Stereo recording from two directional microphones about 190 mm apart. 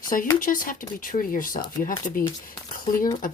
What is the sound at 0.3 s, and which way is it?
Speech, 45° left (ahead or behind).